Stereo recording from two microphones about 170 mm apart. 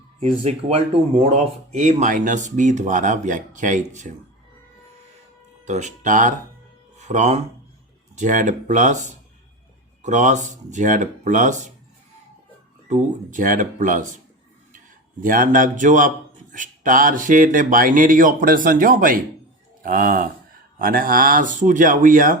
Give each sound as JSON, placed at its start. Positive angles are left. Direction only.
{"t": 0.2, "sound": "a man's voice", "side_deg": -35}
{"t": 5.6, "sound": "a man's voice", "side_deg": -45}
{"t": 12.9, "sound": "a man's voice", "side_deg": -50}
{"t": 15.2, "sound": "a man's voice", "side_deg": -55}